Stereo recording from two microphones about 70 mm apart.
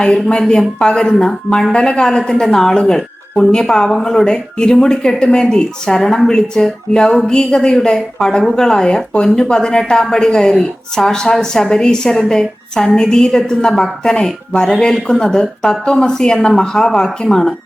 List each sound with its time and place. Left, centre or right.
0.0 s a woman's voice: centre